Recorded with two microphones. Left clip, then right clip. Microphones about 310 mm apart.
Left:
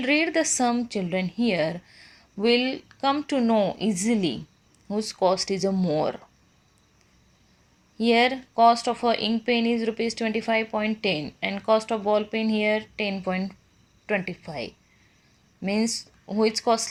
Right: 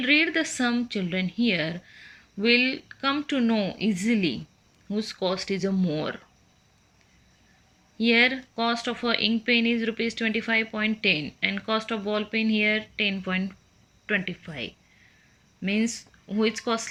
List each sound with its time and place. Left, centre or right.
0.0 s a woman's voice: centre
8.0 s speech: centre